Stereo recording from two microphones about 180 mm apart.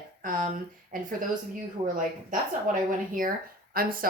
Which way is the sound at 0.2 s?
50° right (ahead or behind).